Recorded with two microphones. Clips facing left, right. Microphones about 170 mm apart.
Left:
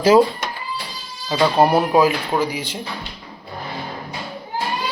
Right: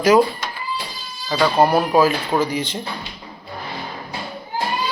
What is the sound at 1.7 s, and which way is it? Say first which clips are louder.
Speech: even; 20° left (ahead or behind).